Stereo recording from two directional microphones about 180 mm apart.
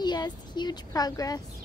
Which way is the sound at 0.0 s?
25° left (ahead or behind).